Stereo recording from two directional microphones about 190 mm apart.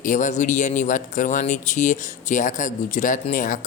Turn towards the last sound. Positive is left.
turn(degrees=45)  # may be behind; listen again after turning